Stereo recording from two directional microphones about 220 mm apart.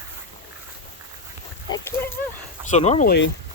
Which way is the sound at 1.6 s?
15° left (ahead or behind).